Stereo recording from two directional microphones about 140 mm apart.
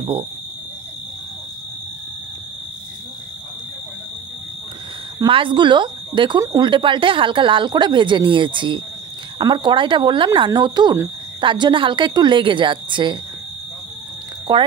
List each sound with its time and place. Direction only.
0.0 s speech: 45° right (ahead or behind)
5.2 s speech: 35° right (ahead or behind)
14.5 s speech: 30° right (ahead or behind)